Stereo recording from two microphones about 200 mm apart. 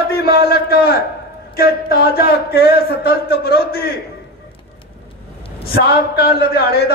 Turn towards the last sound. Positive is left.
turn(degrees=50)  # may be behind; listen again after turning